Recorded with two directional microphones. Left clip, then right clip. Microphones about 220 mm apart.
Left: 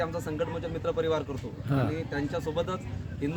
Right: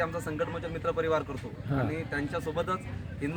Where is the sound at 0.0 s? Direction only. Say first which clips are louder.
Even; 5° left (ahead or behind).